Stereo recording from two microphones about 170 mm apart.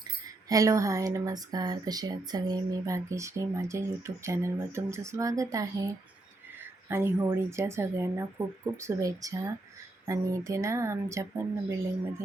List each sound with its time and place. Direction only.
0.4 s speech: 20° right (ahead or behind)